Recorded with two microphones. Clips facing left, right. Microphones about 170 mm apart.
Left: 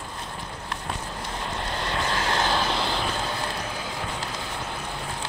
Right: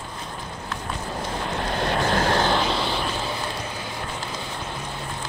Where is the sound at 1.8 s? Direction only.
50° right (ahead or behind).